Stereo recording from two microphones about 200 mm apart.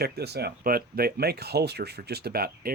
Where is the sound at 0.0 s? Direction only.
55° right (ahead or behind).